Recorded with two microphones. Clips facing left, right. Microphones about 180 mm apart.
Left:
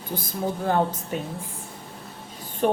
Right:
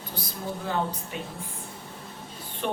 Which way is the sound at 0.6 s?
45° left (ahead or behind).